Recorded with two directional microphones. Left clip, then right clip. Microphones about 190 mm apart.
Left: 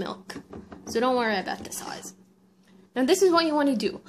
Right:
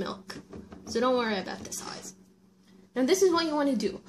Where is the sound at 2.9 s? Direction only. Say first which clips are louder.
Left 3 dB; 15° left (ahead or behind).